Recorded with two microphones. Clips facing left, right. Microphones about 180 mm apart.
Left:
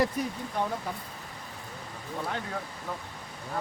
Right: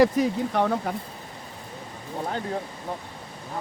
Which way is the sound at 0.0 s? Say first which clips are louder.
Right 9 dB; 80° right.